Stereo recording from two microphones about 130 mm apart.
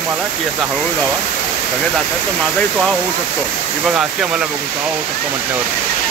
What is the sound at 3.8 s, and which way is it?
Speech, 5° right (ahead or behind).